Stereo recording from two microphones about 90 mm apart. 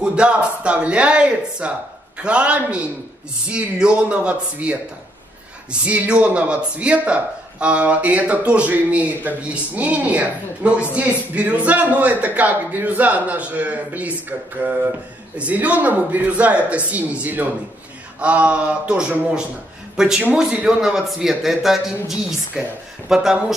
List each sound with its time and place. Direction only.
0.0 s a man's voice: 10° right (ahead or behind)